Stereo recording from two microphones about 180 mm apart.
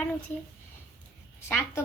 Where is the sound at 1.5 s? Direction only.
15° left (ahead or behind).